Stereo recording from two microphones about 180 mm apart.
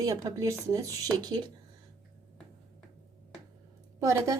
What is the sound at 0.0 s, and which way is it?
A woman's voice, 15° right (ahead or behind).